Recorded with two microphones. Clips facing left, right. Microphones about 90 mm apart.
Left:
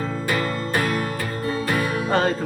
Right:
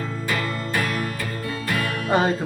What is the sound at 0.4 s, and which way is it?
Music, 30° left (ahead or behind).